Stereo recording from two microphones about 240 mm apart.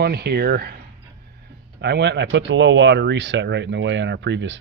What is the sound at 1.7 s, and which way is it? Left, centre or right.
Speech, right.